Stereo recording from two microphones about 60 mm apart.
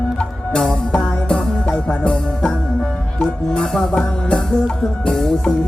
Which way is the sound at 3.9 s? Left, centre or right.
Centre.